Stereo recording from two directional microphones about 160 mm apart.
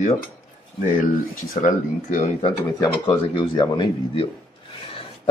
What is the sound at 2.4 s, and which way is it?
Speech, 25° left (ahead or behind).